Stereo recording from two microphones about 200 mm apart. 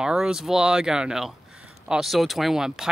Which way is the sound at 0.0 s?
5° right (ahead or behind).